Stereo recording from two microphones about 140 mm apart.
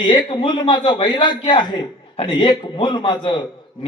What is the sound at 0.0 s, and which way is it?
A man's voice, 35° left (ahead or behind).